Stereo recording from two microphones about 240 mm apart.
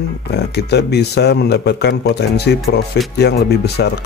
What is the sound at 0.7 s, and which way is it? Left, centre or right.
A man's voice, left.